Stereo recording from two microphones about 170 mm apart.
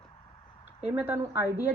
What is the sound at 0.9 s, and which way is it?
Speech, 10° right (ahead or behind).